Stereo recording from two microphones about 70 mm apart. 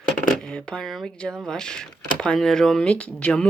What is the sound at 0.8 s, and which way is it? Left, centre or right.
Speech, centre.